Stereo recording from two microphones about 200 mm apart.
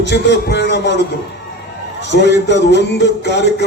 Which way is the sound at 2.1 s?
60° left (ahead or behind).